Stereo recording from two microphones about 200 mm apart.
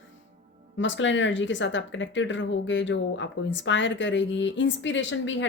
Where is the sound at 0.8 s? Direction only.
65° left (ahead or behind).